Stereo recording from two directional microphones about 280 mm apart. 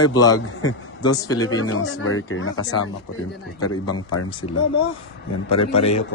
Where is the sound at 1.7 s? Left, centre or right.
Left.